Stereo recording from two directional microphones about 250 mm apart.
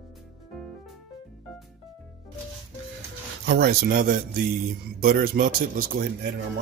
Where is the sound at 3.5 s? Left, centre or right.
Right.